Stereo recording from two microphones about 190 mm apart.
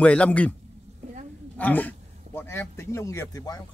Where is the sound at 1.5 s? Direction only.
10° left (ahead or behind).